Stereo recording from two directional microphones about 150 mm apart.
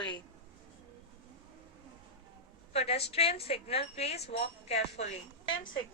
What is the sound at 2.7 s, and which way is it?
A woman's voice, 45° left (ahead or behind).